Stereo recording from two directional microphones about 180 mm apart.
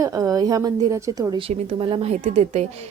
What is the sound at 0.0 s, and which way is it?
A woman's voice, 20° right (ahead or behind).